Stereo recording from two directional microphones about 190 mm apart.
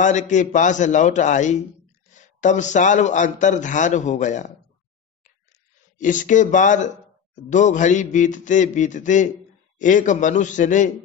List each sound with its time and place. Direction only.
0.0 s a man's voice: 40° left (ahead or behind)
5.5 s a man's voice: 40° left (ahead or behind)